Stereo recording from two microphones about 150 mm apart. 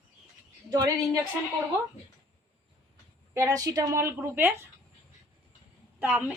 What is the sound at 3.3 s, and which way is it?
Speech, 20° right (ahead or behind).